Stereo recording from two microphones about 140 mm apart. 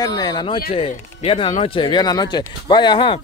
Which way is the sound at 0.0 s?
30° left (ahead or behind).